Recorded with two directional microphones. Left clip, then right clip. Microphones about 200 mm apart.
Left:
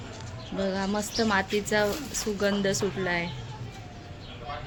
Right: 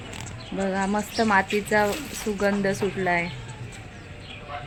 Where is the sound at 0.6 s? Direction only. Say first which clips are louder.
Right 4 dB; 30° right (ahead or behind).